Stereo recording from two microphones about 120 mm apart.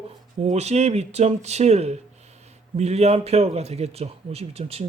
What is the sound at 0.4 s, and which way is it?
Speech, 65° right (ahead or behind).